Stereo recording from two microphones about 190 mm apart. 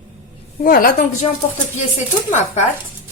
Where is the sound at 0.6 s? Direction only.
50° left (ahead or behind).